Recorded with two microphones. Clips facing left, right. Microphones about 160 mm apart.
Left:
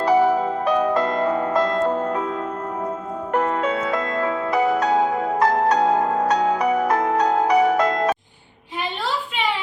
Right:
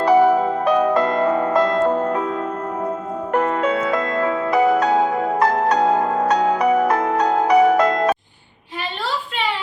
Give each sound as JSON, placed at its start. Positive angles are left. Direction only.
{"t": 0.0, "sound": "music", "side_deg": -60}
{"t": 3.3, "sound": "music", "side_deg": -75}